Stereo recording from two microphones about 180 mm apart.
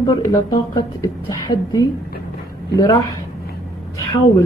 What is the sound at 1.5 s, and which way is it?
Speech, 50° left (ahead or behind).